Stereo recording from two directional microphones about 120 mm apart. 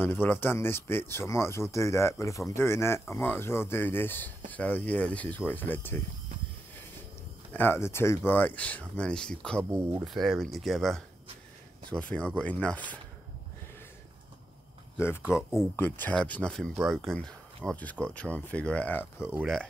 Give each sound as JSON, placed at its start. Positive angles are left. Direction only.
{"t": 0.0, "sound": "speech", "side_deg": 15}
{"t": 7.5, "sound": "speech", "side_deg": 20}
{"t": 15.7, "sound": "speech", "side_deg": 15}
{"t": 19.3, "sound": "speech", "side_deg": 0}